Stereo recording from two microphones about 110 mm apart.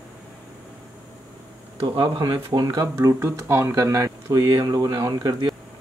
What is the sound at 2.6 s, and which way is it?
Speech, 25° right (ahead or behind).